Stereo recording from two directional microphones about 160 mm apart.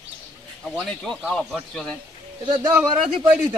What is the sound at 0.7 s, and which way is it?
A man's voice, 5° left (ahead or behind).